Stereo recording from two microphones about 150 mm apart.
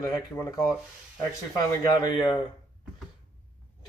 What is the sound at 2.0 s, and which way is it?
Speech, 30° left (ahead or behind).